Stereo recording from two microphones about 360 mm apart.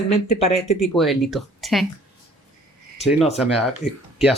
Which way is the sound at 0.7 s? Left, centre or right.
Centre.